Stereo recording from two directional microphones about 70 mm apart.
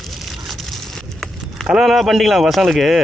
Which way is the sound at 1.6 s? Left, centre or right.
Centre.